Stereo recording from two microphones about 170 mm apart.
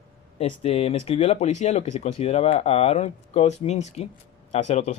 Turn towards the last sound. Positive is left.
turn(degrees=40)  # may be behind; listen again after turning